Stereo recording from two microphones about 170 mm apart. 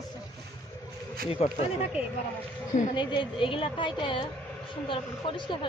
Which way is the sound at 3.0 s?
30° left (ahead or behind).